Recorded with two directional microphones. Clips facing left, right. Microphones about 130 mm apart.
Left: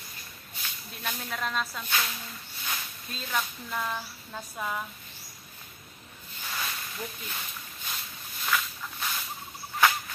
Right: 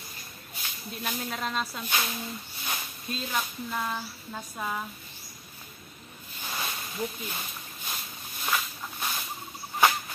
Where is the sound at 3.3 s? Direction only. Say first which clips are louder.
Left 2 dB; 15° right (ahead or behind).